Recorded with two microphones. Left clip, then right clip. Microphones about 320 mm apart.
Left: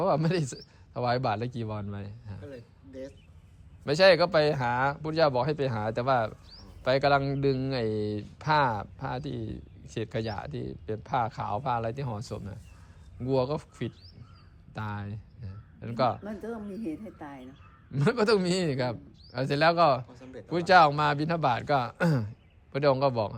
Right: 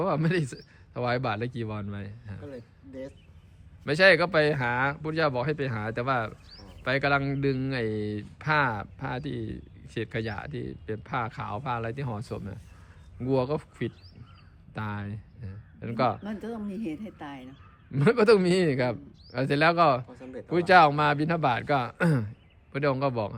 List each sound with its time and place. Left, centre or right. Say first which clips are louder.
0.0 s a man's voice: left 1 dB; centre
2.5 s a sound: right 2 dB; right
3.8 s a man's voice: even; centre
16.2 s speech: right 1 dB; right
17.9 s speech: right 4 dB; centre
20.1 s a sound: right 4 dB; right
20.5 s speech: right 1 dB; centre